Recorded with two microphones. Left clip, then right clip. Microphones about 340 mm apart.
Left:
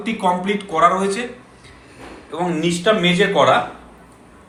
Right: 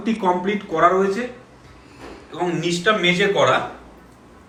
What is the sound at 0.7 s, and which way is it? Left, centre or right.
Speech, left.